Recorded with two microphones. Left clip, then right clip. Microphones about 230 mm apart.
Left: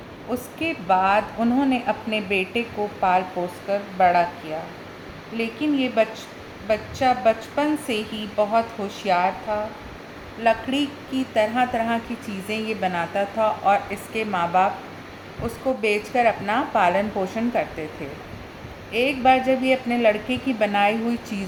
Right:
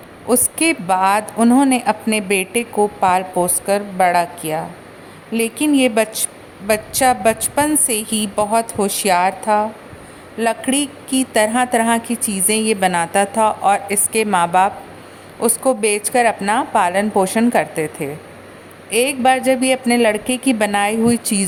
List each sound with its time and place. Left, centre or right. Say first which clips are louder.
0.3 s a woman's voice: right 10 dB; right
18.9 s a woman's voice: right 4 dB; right